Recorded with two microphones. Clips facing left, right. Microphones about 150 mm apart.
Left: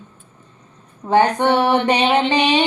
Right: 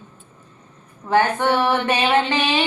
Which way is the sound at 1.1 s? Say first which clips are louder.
Left 3 dB; 20° left (ahead or behind).